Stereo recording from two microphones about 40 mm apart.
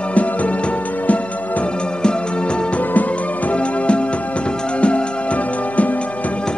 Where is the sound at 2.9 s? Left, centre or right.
Left.